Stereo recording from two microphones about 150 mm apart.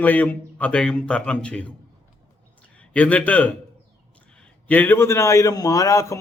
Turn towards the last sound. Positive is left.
turn(degrees=20)  # may be behind; listen again after turning